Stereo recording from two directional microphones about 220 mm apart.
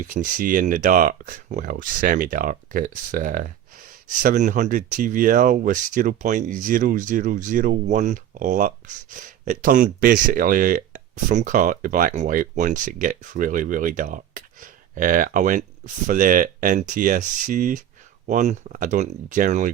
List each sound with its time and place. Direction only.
0.0 s speech: 35° right (ahead or behind)